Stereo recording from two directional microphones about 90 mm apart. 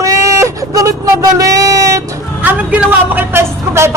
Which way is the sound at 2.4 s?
20° right (ahead or behind).